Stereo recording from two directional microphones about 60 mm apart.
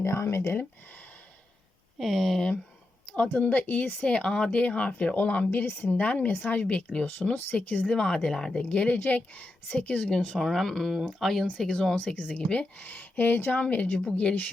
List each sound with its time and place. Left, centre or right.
0.0 s speech: left
2.0 s speech: centre
3.3 s a woman's voice: left; by 8.6 s centre
8.7 s a woman's voice: centre
10.3 s speech: centre
11.9 s a woman's voice: left